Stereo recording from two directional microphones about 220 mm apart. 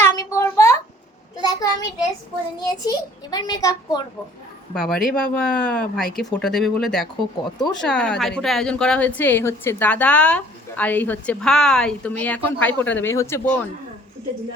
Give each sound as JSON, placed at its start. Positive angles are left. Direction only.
{"t": 0.0, "sound": "a sound", "side_deg": 10}
{"t": 2.6, "sound": "a woman's voice", "side_deg": 15}
{"t": 4.7, "sound": "a woman's voice", "side_deg": 0}